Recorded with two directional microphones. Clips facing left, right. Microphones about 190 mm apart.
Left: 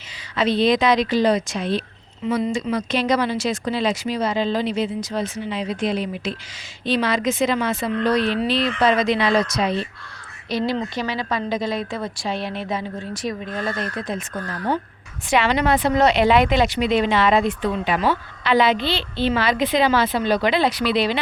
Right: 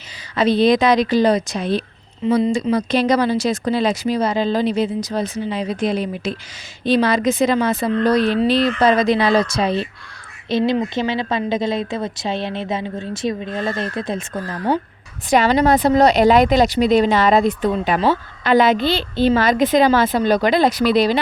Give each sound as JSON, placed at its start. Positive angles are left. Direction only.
{"t": 0.3, "sound": "a woman's voice", "side_deg": -40}
{"t": 15.3, "sound": "speech", "side_deg": -40}